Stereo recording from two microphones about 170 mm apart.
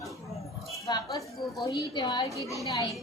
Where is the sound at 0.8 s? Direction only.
20° left (ahead or behind).